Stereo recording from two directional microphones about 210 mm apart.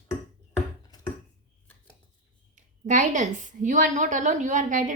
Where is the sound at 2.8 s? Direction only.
35° right (ahead or behind).